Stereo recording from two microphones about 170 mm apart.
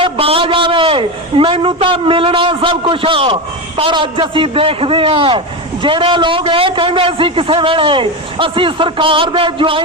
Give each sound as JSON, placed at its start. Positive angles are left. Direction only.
{"t": 0.0, "sound": "a man's voice", "side_deg": -35}